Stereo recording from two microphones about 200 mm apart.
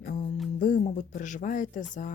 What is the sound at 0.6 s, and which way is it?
Speech, 40° left (ahead or behind).